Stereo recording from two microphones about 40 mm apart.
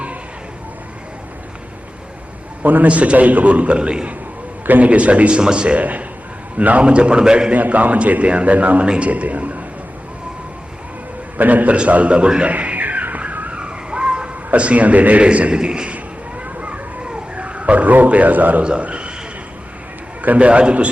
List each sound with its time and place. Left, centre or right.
2.8 s a man's voice: right
4.6 s speech: right
4.9 s a man's voice: right
5.4 s a man's voice: right
5.8 s a man's voice: right; by 7.5 s centre
7.5 s a man's voice: right
11.3 s a man's voice: right
12.5 s music: right
13.5 s a sound: right
16.6 s a sound: right
17.3 s a man's voice: right
18.6 s a man's voice: right
20.2 s a man's voice: right